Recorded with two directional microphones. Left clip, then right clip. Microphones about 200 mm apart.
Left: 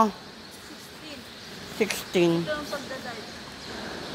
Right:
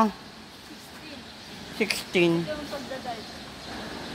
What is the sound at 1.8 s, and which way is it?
Speech, 5° right (ahead or behind).